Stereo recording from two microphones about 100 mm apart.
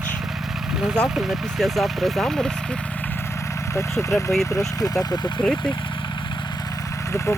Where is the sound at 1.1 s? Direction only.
Centre (ahead or behind).